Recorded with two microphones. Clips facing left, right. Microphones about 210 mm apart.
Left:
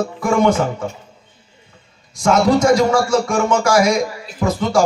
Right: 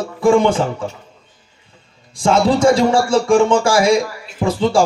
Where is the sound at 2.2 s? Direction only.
30° right (ahead or behind).